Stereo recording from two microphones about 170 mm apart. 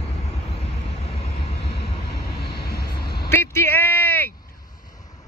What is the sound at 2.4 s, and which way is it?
Vehicle, 70° left (ahead or behind).